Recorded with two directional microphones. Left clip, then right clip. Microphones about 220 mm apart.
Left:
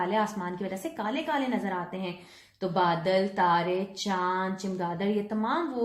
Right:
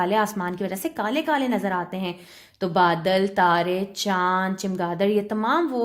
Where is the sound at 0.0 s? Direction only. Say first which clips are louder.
Right 6 dB; 50° right (ahead or behind).